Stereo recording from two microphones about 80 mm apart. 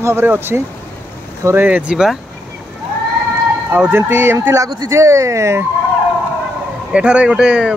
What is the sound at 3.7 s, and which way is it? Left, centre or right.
Speech, right.